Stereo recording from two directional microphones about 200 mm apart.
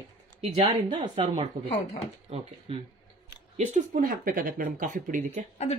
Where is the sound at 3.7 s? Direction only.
45° right (ahead or behind).